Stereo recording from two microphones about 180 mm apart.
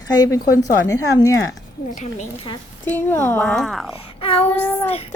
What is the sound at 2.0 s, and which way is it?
Speech, 40° left (ahead or behind).